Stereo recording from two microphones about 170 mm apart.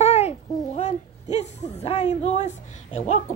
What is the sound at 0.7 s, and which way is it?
Speech, 40° left (ahead or behind).